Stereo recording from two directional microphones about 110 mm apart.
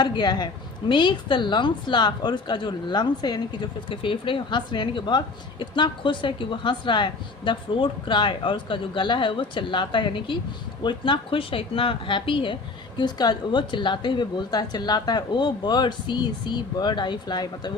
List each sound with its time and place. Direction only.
0.0 s a woman's voice: 40° left (ahead or behind)